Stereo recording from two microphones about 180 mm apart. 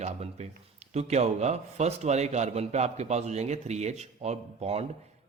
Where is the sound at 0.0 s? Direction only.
40° right (ahead or behind).